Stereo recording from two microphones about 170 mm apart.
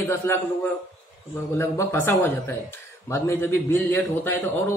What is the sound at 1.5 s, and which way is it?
A man's voice, 15° left (ahead or behind).